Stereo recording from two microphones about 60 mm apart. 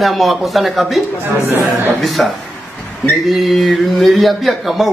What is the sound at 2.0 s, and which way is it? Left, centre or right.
A man's voice, centre.